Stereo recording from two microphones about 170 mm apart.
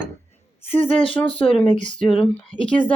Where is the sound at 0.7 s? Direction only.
30° left (ahead or behind).